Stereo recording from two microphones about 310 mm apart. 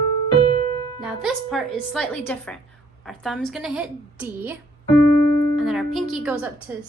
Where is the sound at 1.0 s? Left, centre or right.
Centre.